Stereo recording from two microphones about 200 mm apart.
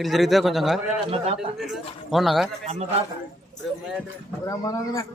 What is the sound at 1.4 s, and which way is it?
A man's voice, centre (ahead or behind).